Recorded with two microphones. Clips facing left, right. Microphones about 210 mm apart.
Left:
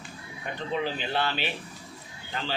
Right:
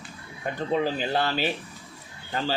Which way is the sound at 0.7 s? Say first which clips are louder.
Right 4 dB; 40° right (ahead or behind).